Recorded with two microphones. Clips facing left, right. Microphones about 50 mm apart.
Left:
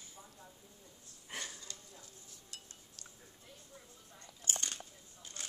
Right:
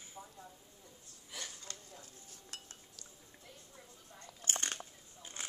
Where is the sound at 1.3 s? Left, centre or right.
Left.